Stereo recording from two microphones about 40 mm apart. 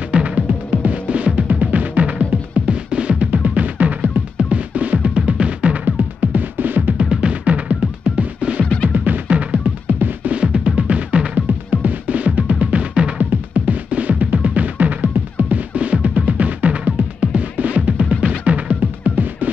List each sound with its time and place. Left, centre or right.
0.1 s music: right
3.3 s music: right
7.0 s music: right
8.8 s music: right
9.3 s music: right
9.9 s music: right
10.3 s music: right